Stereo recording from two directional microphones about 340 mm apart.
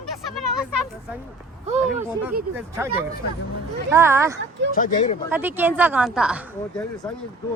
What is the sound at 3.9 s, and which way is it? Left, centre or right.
Speech, centre.